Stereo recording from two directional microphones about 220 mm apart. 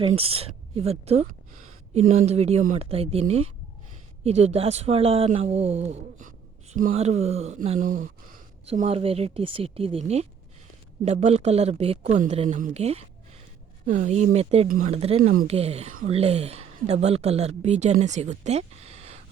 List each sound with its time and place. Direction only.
0.1 s speech: 25° right (ahead or behind)
11.0 s speech: 30° right (ahead or behind)